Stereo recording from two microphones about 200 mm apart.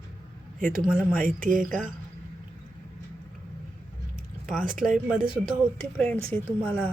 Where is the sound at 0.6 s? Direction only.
45° right (ahead or behind).